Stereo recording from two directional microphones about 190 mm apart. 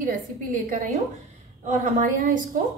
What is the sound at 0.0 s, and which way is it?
A woman's voice, 45° right (ahead or behind).